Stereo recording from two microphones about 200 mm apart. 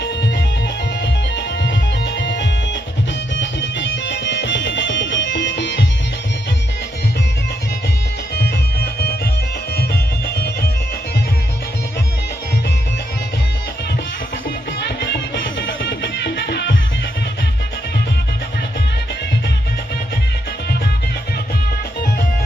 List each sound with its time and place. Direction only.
1.0 s music: 60° left (ahead or behind)
8.4 s music: 55° left (ahead or behind)
14.8 s music: 60° left (ahead or behind)